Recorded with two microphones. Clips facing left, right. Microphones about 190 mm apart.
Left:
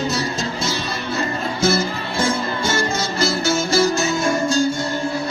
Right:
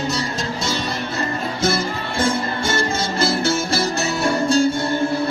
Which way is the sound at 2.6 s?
55° right (ahead or behind).